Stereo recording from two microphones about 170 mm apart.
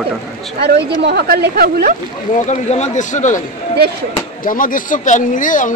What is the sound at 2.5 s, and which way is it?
Speech, 40° left (ahead or behind).